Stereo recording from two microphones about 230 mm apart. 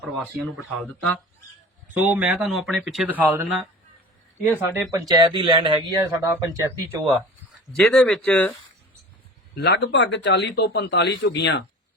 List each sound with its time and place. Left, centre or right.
0.0 s speech: centre
7.8 s speech: centre
9.6 s speech: left